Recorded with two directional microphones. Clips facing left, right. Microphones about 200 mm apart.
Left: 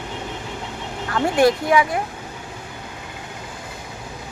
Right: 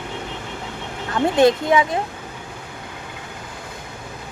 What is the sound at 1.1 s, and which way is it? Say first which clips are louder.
Speech: right 2 dB; 20° right (ahead or behind).